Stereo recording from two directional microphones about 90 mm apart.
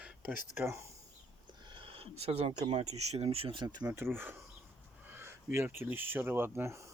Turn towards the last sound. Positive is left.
turn(degrees=-30)  # may be behind; listen again after turning